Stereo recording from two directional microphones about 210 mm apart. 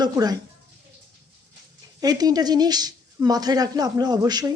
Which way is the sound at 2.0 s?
20° right (ahead or behind).